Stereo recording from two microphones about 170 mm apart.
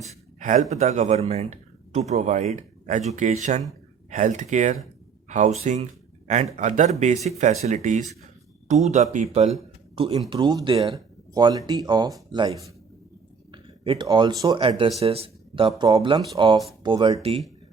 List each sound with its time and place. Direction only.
0.3 s speech: 45° right (ahead or behind)
10.2 s speech: 25° right (ahead or behind)